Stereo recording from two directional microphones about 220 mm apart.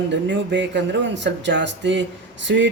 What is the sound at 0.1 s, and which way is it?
Speech, 55° right (ahead or behind).